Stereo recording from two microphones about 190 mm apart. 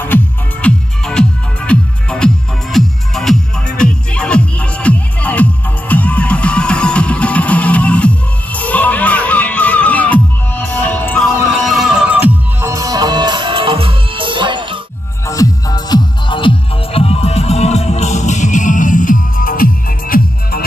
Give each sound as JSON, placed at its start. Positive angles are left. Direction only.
{"t": 0.0, "sound": "music", "side_deg": 10}
{"t": 15.2, "sound": "music", "side_deg": 20}